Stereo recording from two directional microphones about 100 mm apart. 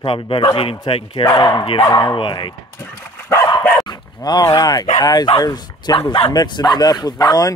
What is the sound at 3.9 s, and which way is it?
Speech, 40° left (ahead or behind).